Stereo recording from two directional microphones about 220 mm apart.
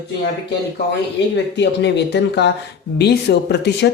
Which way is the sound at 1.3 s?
50° left (ahead or behind).